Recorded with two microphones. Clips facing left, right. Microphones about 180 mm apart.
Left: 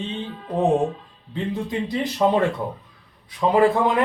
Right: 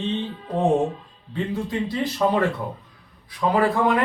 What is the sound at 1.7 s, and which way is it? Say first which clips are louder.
Speech: even; 20° left (ahead or behind).